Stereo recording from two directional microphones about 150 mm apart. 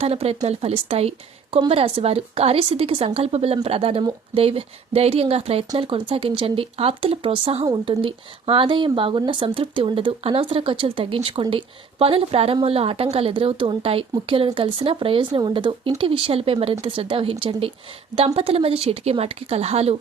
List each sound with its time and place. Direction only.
0.0 s a woman's voice: 45° right (ahead or behind)
18.3 s a woman's voice: 40° right (ahead or behind)